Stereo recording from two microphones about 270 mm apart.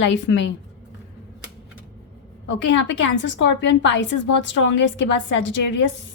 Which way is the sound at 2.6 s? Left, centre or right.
Left.